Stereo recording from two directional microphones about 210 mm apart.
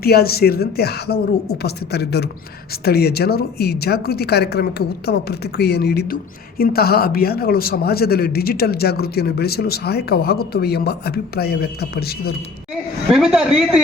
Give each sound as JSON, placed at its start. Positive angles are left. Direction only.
{"t": 0.0, "sound": "speech", "side_deg": 45}
{"t": 13.1, "sound": "a man's voice", "side_deg": 0}